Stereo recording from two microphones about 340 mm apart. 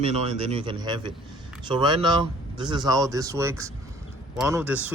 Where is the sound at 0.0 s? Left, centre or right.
Centre.